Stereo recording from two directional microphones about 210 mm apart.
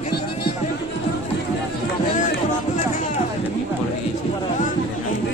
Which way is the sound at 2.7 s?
35° left (ahead or behind).